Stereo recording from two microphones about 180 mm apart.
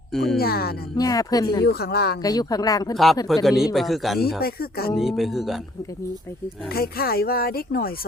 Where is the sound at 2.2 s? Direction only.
20° left (ahead or behind).